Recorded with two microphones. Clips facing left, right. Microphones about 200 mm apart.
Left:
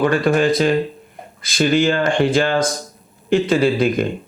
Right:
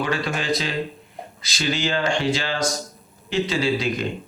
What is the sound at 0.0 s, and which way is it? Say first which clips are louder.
Speech: left 10 dB; 50° left (ahead or behind).